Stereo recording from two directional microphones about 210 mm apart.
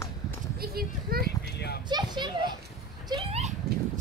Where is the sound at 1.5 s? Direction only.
50° left (ahead or behind).